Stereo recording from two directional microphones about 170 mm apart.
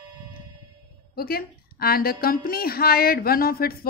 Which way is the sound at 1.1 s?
65° left (ahead or behind).